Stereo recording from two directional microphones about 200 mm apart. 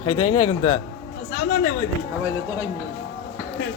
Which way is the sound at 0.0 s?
25° left (ahead or behind).